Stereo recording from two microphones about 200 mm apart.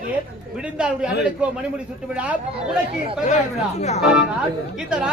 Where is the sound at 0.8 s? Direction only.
5° right (ahead or behind).